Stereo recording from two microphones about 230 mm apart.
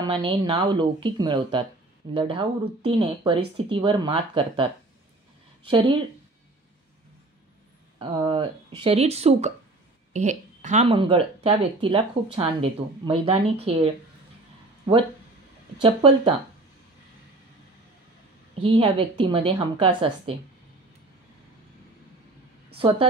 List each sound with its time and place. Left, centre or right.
0.0 s speech: right
5.7 s speech: right
8.0 s speech: right
15.8 s speech: right
18.6 s speech: right
22.8 s speech: right